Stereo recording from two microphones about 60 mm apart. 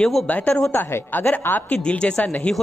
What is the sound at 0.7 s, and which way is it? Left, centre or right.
Speech, left.